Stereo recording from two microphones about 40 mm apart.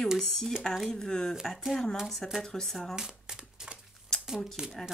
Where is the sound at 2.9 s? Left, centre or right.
Centre.